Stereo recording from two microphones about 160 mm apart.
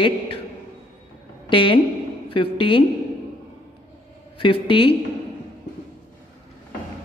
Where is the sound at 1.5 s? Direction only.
30° left (ahead or behind).